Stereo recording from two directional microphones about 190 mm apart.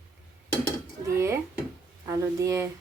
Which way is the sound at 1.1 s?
15° right (ahead or behind).